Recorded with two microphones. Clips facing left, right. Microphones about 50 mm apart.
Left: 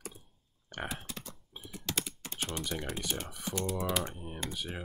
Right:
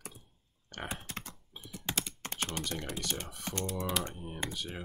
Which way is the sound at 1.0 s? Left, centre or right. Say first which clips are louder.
Right 1 dB; right.